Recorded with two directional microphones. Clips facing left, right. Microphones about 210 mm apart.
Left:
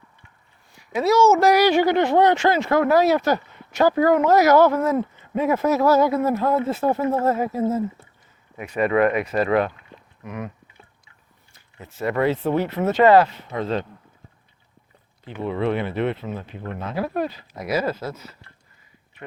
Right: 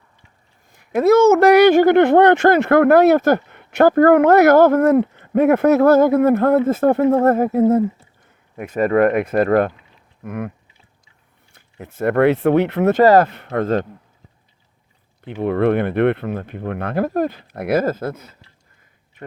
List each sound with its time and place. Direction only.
0.7 s speech: 55° right (ahead or behind)
8.5 s speech: 50° right (ahead or behind)
11.5 s speech: 60° right (ahead or behind)
13.0 s speech: 40° right (ahead or behind)
13.2 s speech: 60° right (ahead or behind)
15.2 s speech: 60° right (ahead or behind)